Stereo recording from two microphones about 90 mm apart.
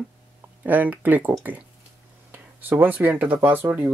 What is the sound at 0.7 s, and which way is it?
Speech, 20° right (ahead or behind).